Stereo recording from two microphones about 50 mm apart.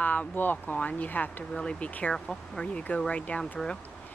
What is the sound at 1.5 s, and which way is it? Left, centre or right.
Speech, left.